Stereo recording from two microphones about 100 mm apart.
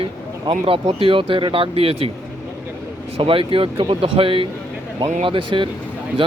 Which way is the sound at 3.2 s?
60° right (ahead or behind).